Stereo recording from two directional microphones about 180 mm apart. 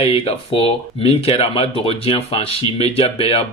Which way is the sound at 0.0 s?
35° left (ahead or behind).